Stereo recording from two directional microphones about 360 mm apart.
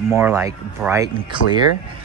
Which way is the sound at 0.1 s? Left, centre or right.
Centre.